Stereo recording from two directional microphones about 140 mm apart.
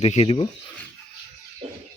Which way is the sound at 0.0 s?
50° left (ahead or behind).